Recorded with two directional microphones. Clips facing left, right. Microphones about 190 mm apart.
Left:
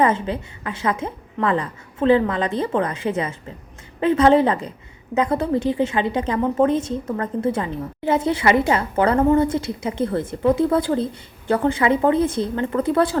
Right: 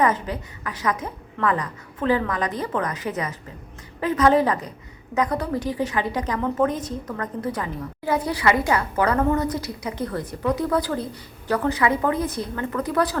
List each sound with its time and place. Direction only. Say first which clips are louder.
0.0 s a woman's voice: left 3 dB; 25° left (ahead or behind)